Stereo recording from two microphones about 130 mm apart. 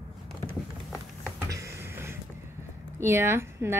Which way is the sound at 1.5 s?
20° right (ahead or behind).